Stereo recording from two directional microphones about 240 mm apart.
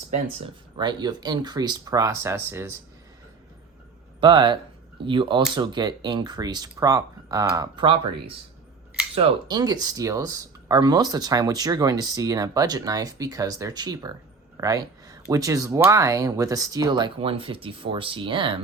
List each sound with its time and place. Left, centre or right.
0.1 s speech: right
4.2 s speech: centre